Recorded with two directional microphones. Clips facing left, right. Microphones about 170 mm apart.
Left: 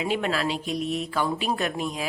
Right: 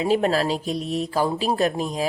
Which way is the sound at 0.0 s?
35° right (ahead or behind).